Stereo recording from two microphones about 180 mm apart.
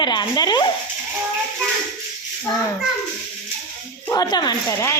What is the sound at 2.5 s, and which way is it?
Speech, 20° left (ahead or behind).